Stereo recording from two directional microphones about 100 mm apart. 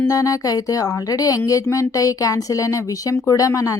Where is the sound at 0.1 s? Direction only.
35° left (ahead or behind).